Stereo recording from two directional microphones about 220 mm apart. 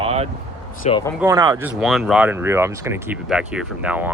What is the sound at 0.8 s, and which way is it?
Speech, 25° left (ahead or behind).